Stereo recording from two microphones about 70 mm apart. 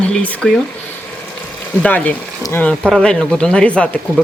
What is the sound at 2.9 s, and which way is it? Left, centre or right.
Speech, centre.